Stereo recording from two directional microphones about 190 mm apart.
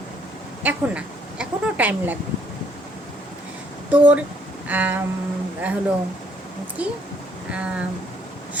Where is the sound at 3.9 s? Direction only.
10° right (ahead or behind).